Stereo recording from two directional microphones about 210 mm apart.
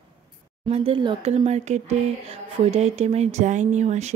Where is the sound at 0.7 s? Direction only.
25° right (ahead or behind).